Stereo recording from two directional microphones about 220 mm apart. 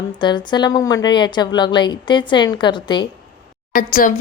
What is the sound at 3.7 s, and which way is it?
Speech, 40° left (ahead or behind).